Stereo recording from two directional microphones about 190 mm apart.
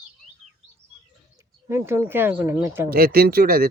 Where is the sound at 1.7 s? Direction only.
15° right (ahead or behind).